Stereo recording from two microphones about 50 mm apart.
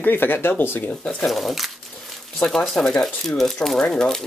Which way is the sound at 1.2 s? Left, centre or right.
Centre.